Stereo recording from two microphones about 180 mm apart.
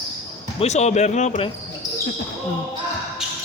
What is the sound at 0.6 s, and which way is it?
Speech, 40° left (ahead or behind).